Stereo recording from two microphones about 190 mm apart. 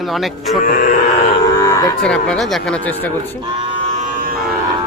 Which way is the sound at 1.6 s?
15° left (ahead or behind).